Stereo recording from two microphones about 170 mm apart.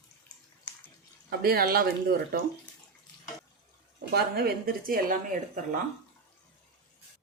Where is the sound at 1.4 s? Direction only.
65° right (ahead or behind).